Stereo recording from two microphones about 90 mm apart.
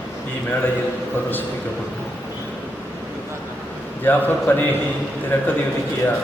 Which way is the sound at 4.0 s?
20° left (ahead or behind).